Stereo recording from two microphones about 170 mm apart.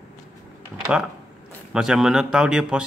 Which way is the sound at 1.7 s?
5° right (ahead or behind).